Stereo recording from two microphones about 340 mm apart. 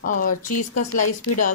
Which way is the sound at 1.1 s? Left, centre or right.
Left.